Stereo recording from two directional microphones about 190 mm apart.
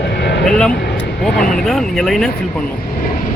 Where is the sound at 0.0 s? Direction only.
65° left (ahead or behind).